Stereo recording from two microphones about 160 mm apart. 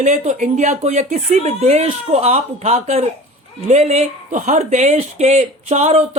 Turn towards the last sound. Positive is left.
turn(degrees=-40)  # may be behind; listen again after turning